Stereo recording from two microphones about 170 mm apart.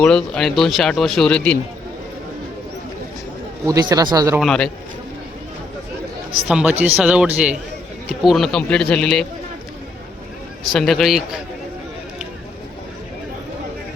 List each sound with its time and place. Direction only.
0.0 s speech: 5° left (ahead or behind)
3.7 s speech: 20° right (ahead or behind)
4.4 s speech: 5° left (ahead or behind)
6.5 s speech: 5° right (ahead or behind)
10.7 s speech: centre (ahead or behind)